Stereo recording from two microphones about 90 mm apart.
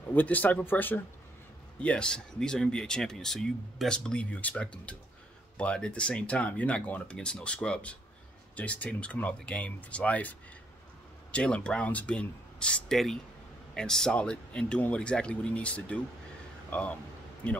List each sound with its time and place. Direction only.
0.1 s speech: 20° left (ahead or behind)
11.3 s speech: 10° left (ahead or behind)
17.4 s speech: 15° left (ahead or behind)